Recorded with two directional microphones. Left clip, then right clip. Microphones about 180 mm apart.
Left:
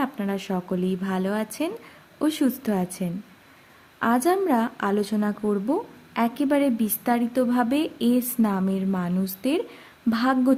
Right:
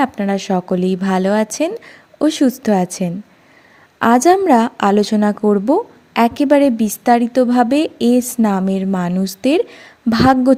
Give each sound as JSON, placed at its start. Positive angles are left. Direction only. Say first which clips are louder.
{"t": 0.0, "sound": "speech", "louder": "right 10 dB", "side_deg": -35}